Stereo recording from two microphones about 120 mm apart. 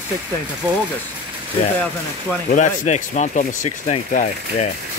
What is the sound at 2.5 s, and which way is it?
Speech, 85° left.